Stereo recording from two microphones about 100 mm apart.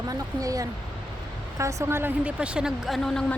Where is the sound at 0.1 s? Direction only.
35° right (ahead or behind).